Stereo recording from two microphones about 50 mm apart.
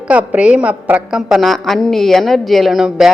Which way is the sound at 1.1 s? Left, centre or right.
Centre.